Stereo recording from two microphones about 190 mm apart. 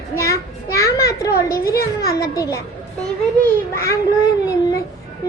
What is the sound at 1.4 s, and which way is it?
A child's voice, 15° left (ahead or behind).